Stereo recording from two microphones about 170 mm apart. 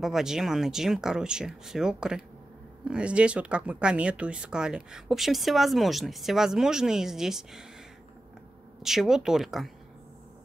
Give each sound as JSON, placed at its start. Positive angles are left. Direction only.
{"t": 0.0, "sound": "speech", "side_deg": -5}
{"t": 8.8, "sound": "speech", "side_deg": 0}